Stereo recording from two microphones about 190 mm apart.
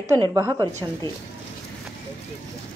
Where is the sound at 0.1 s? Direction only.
20° right (ahead or behind).